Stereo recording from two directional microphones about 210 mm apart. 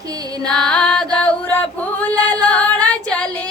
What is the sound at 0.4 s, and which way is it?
Female singing, 5° left (ahead or behind).